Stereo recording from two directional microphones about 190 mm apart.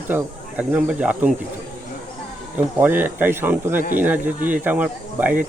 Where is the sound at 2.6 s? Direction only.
10° right (ahead or behind).